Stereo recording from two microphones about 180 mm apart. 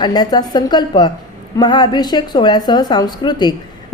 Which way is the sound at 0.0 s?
20° left (ahead or behind).